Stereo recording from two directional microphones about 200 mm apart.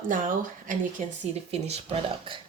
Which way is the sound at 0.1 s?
40° right (ahead or behind).